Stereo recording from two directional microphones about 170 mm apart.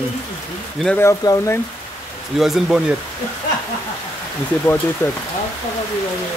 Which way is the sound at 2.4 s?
Centre (ahead or behind).